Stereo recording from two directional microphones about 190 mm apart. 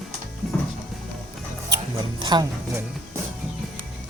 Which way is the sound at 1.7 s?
25° right (ahead or behind).